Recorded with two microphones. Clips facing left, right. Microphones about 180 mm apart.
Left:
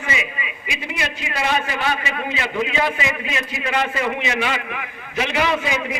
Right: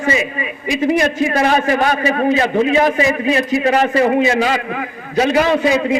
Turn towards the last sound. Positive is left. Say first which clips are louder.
# right 8 dB
turn(degrees=-35)  # may be behind; listen again after turning